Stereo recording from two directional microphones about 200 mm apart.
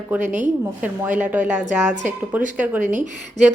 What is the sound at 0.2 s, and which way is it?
Speech, 40° right (ahead or behind).